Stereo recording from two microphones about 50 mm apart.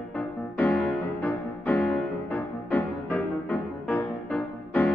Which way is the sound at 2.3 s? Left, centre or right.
Left.